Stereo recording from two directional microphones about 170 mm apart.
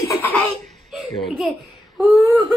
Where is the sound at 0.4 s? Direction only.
Centre (ahead or behind).